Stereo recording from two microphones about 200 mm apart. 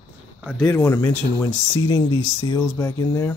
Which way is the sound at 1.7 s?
20° left (ahead or behind).